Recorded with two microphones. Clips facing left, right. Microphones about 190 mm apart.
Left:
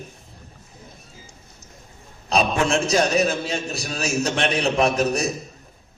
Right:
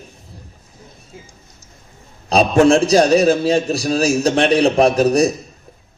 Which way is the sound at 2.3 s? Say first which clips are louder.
Right 9 dB; 35° right (ahead or behind).